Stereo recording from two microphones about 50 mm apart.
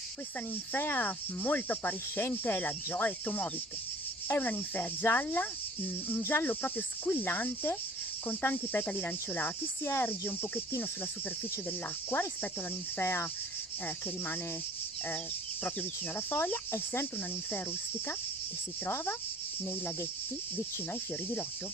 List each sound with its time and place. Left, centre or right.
0.7 s cricket: left
4.4 s cricket: left
5.0 s speech: left
6.0 s cricket: left
8.3 s speech: left
8.8 s cricket: left
13.0 s cricket: left
13.8 s speech: left
15.6 s cricket: left
16.7 s cricket: left